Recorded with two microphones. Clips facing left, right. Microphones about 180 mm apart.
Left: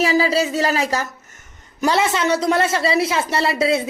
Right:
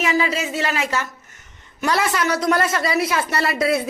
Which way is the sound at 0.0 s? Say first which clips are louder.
Left 4 dB; 35° left (ahead or behind).